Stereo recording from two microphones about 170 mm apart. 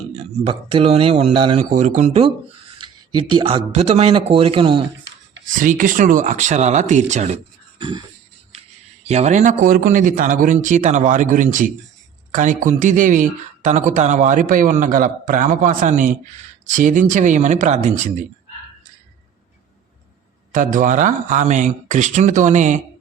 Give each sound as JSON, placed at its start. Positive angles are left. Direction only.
{"t": 0.2, "sound": "speech", "side_deg": -35}
{"t": 2.7, "sound": "speech", "side_deg": -25}
{"t": 5.5, "sound": "speech", "side_deg": -50}
{"t": 7.8, "sound": "a sound", "side_deg": -30}
{"t": 9.0, "sound": "speech", "side_deg": -40}
{"t": 20.5, "sound": "speech", "side_deg": -50}